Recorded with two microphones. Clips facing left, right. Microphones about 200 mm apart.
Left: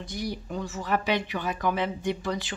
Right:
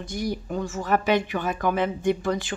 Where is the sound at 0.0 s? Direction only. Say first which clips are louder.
Right 4 dB; 45° right (ahead or behind).